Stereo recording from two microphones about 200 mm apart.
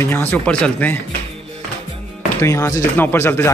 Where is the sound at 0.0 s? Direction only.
10° left (ahead or behind).